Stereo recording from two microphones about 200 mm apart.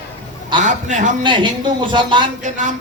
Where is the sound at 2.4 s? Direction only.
40° right (ahead or behind).